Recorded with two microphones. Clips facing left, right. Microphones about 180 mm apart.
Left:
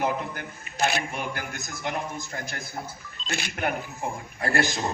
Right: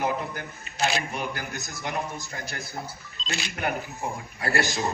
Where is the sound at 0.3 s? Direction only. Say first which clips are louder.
Left 1 dB; 55° left (ahead or behind).